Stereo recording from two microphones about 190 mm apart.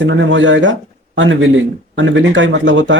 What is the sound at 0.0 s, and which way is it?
Speech, 80° right.